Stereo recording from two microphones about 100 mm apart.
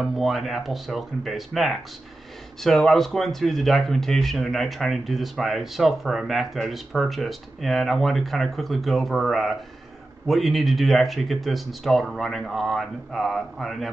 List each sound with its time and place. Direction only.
0.0 s speech: centre (ahead or behind)